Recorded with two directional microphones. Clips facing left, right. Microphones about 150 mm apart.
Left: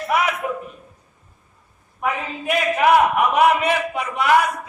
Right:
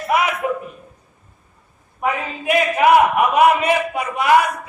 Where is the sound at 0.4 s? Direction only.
15° right (ahead or behind).